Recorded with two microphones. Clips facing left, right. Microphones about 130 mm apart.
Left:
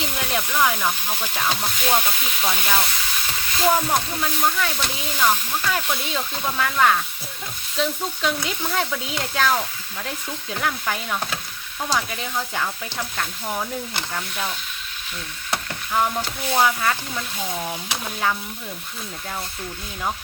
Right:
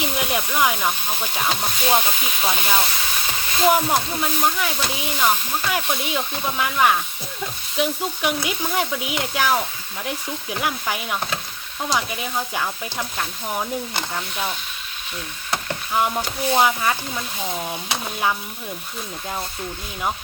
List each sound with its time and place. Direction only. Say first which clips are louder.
0.0 s speech: right 2 dB; 15° right (ahead or behind)
1.5 s a sound: right 1 dB; 5° right (ahead or behind)
2.2 s speech: right 1 dB; 15° right (ahead or behind)
15.5 s stir: right 1 dB; 15° right (ahead or behind)
16.4 s speech: right 2 dB; 20° right (ahead or behind)